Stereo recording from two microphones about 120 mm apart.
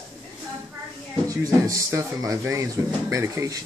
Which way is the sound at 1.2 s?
25° right (ahead or behind).